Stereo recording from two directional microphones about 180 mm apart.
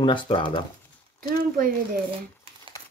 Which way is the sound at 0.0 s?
25° left (ahead or behind).